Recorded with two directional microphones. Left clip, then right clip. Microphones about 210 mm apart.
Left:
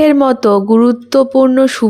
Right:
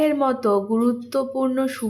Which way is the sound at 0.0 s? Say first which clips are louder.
Left 10 dB; 45° left (ahead or behind).